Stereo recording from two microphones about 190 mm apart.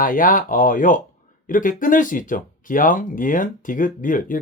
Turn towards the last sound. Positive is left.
turn(degrees=45)  # may be behind; listen again after turning